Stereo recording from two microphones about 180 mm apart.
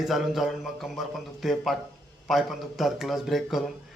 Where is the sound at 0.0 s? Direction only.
Centre (ahead or behind).